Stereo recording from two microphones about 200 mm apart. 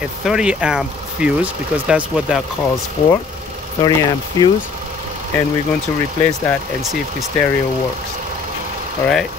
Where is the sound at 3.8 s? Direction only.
20° left (ahead or behind).